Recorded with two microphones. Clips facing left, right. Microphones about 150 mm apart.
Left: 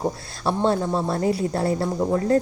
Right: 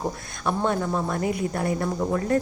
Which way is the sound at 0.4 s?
30° left (ahead or behind).